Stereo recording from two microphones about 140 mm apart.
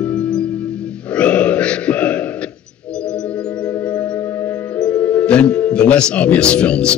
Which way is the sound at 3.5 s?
25° left (ahead or behind).